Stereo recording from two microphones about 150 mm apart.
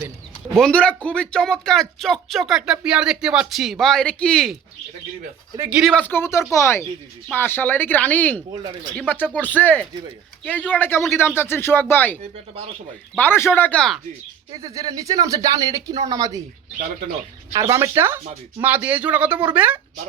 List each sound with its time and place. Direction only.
0.5 s speech: 5° left (ahead or behind)
5.5 s a man's voice: 15° right (ahead or behind)
5.8 s speech: 5° left (ahead or behind)
14.5 s speech: 25° right (ahead or behind)
17.5 s a man's voice: 20° right (ahead or behind)